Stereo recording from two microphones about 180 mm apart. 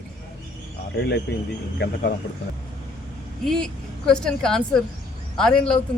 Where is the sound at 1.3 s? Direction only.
65° left (ahead or behind).